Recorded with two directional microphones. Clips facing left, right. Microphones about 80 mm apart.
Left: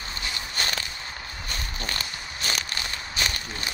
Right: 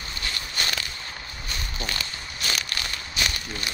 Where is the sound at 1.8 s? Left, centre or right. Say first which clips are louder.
Even; left.